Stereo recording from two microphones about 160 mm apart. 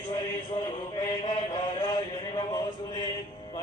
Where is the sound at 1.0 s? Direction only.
25° left (ahead or behind).